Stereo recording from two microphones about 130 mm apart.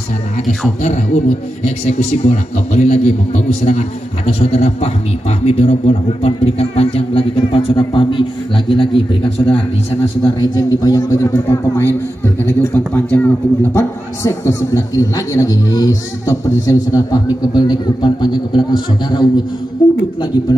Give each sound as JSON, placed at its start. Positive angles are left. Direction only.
{"t": 0.8, "sound": "a man's voice", "side_deg": 65}